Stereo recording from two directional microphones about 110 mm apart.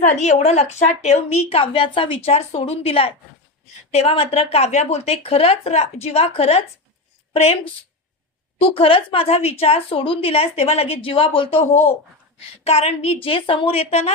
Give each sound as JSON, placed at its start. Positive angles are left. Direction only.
{"t": 0.1, "sound": "a woman's voice", "side_deg": 90}
{"t": 8.5, "sound": "a woman's voice", "side_deg": 60}
{"t": 12.6, "sound": "a woman's voice", "side_deg": 70}
{"t": 13.2, "sound": "a woman's voice", "side_deg": 55}